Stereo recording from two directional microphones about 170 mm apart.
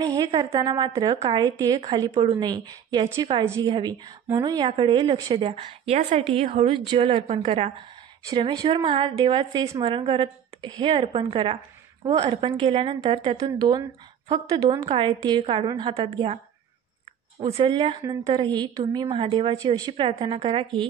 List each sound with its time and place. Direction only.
0.0 s a woman's voice: 25° right (ahead or behind)
8.3 s a woman's voice: 25° right (ahead or behind)
13.4 s a woman's voice: 25° right (ahead or behind)
17.6 s a woman's voice: 30° right (ahead or behind)
19.5 s a woman's voice: 20° right (ahead or behind)